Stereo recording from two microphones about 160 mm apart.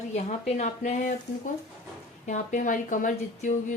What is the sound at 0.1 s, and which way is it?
Speech, 45° left (ahead or behind).